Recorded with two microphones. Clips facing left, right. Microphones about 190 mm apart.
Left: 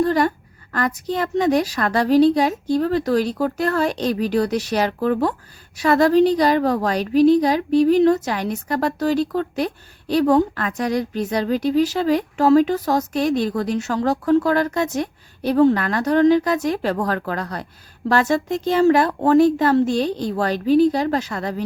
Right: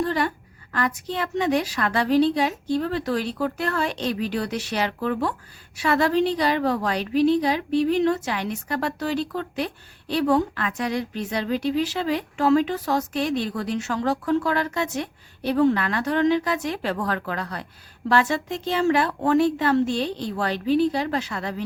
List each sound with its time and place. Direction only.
0.0 s a woman's voice: 40° left (ahead or behind)